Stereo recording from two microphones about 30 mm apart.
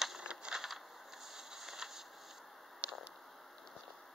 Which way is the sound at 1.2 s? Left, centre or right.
Centre.